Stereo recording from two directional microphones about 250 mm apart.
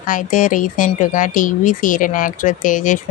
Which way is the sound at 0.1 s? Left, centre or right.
Left.